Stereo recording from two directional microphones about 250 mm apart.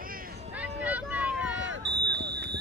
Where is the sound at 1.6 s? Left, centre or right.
Right.